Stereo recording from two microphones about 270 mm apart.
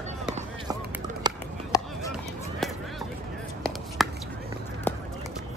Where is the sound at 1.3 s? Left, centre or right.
Centre.